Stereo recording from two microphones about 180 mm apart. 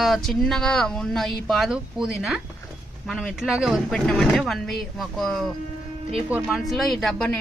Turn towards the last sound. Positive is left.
turn(degrees=5)  # may be behind; listen again after turning